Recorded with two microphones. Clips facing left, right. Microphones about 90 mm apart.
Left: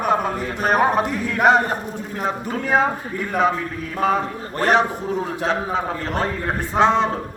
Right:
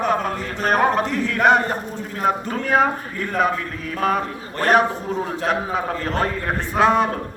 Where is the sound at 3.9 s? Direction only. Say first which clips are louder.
Left 1 dB; 15° left (ahead or behind).